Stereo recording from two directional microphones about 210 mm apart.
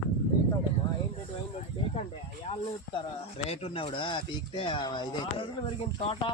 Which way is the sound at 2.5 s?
30° left (ahead or behind).